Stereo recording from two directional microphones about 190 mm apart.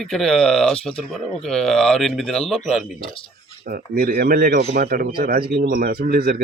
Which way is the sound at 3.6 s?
50° right (ahead or behind).